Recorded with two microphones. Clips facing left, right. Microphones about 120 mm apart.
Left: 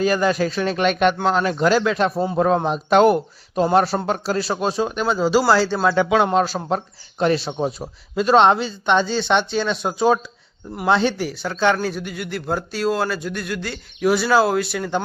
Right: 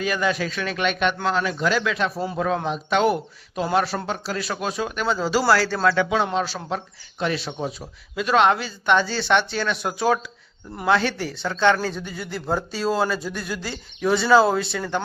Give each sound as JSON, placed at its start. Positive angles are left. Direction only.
{"t": 0.0, "sound": "speech", "side_deg": 35}
{"t": 6.2, "sound": "speech", "side_deg": 45}